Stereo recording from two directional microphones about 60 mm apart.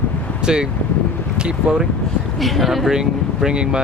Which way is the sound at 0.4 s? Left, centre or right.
Centre.